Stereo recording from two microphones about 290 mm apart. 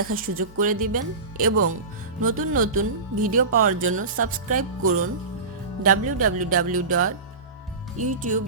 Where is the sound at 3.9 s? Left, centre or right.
Right.